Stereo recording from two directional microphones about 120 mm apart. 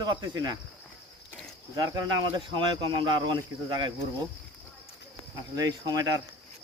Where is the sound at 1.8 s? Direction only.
35° right (ahead or behind).